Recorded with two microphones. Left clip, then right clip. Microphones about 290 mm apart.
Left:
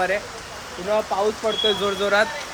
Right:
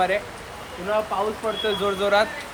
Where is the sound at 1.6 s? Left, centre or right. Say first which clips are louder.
Left 1 dB; centre.